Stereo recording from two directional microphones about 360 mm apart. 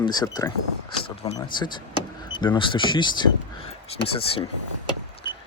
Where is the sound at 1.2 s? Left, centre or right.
Centre.